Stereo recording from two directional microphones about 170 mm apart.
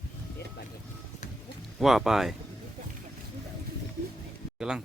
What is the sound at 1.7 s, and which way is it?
Speech, centre (ahead or behind).